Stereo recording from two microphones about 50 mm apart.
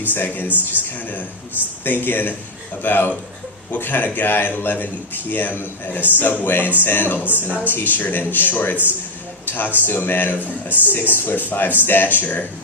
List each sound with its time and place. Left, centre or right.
0.1 s a man's voice: left
0.4 s speech: right
0.9 s a man's voice: left
10.4 s speech: right
11.1 s a man's voice: left